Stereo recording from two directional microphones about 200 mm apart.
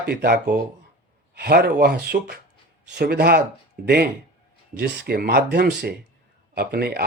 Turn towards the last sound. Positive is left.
turn(degrees=-50)  # may be behind; listen again after turning